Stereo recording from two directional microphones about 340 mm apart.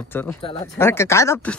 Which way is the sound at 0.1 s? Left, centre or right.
Centre.